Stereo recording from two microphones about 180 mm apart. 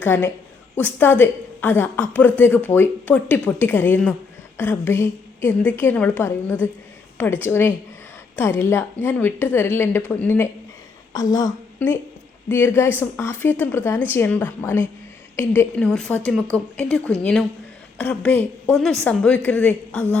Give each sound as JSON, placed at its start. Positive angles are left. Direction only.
{"t": 0.0, "sound": "a woman's voice", "side_deg": 10}